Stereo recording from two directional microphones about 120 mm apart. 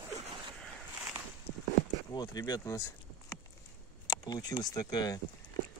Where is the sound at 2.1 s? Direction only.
35° left (ahead or behind).